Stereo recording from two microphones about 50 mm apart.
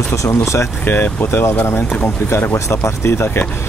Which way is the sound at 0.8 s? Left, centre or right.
Left.